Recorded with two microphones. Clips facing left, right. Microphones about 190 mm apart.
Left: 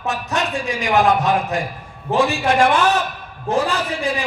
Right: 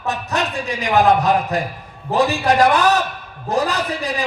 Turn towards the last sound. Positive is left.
turn(degrees=-35)  # may be behind; listen again after turning